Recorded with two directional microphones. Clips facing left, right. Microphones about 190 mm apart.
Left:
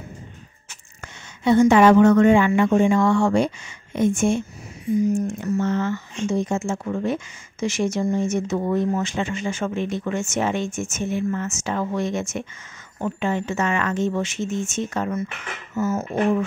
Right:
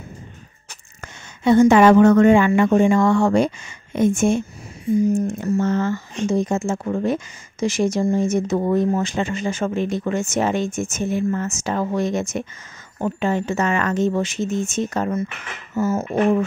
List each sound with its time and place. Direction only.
1.0 s speech: 45° right (ahead or behind)